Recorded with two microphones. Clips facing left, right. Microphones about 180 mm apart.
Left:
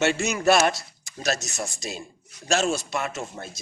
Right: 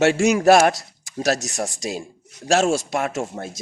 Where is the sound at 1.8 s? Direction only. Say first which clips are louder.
Right 7 dB; 70° right (ahead or behind).